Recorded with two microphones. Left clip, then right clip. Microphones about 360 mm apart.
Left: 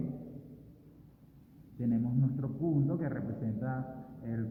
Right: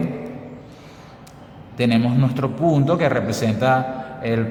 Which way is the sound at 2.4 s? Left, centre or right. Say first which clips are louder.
Right 18 dB; right.